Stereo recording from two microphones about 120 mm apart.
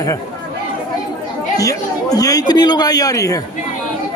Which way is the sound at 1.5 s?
30° left (ahead or behind).